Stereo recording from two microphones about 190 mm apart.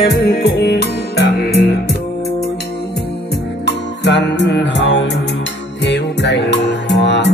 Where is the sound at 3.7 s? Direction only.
65° left (ahead or behind).